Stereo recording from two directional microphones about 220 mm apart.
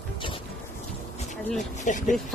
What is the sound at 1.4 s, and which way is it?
Speech, centre (ahead or behind).